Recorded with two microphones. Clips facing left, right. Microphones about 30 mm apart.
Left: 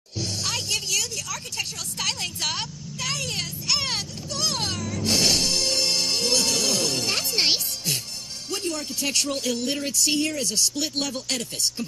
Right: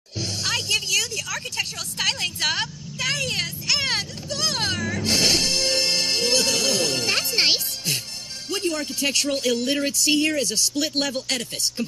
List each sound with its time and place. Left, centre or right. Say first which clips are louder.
0.2 s music: right 3 dB; right
8.5 s speech: right 4 dB; right